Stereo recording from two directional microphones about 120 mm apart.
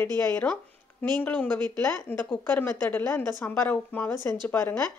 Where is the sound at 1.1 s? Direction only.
15° left (ahead or behind).